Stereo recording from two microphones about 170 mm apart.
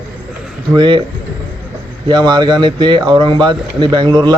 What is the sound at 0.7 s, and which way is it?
Speech, 30° right (ahead or behind).